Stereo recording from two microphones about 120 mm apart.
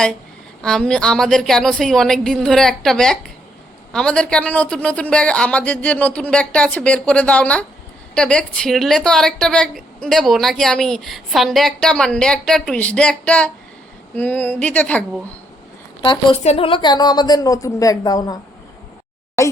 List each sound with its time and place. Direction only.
0.6 s a woman's voice: 5° left (ahead or behind)
16.0 s a woman's voice: 45° left (ahead or behind)
16.4 s speech: 65° left (ahead or behind)
16.6 s a woman's voice: 40° left (ahead or behind)
19.4 s speech: 25° left (ahead or behind)